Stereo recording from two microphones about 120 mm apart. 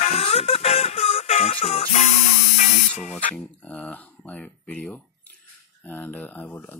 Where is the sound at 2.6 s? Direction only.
75° left (ahead or behind).